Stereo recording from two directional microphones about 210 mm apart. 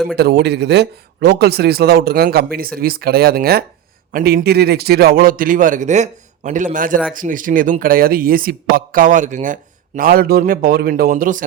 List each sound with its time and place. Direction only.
0.2 s speech: 50° right (ahead or behind)